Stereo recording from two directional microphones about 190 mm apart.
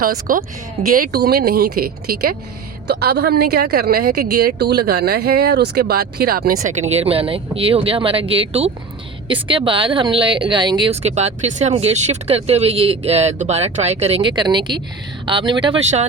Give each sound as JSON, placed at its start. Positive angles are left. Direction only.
{"t": 0.0, "sound": "speech", "side_deg": -50}